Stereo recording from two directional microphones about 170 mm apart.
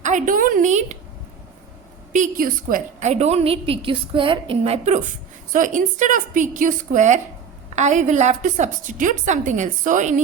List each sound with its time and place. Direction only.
0.0 s a woman's voice: 45° right (ahead or behind)
2.1 s a woman's voice: 50° right (ahead or behind)